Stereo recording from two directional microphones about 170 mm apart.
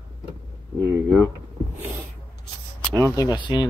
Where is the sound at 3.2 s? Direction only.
25° left (ahead or behind).